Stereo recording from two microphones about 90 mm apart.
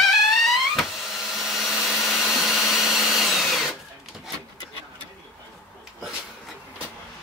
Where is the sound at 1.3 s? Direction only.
Centre (ahead or behind).